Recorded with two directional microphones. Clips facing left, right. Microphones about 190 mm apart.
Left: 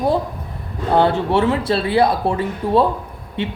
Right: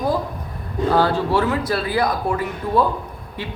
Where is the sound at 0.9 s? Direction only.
25° left (ahead or behind).